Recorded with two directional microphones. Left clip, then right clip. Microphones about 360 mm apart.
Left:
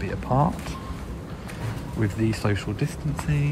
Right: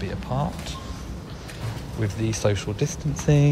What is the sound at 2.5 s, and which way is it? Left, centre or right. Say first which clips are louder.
Speech: right 1 dB; right.